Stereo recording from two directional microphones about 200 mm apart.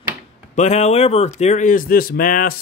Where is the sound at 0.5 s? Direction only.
35° left (ahead or behind).